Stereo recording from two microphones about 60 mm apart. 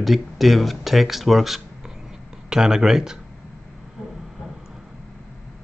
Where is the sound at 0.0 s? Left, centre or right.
Centre.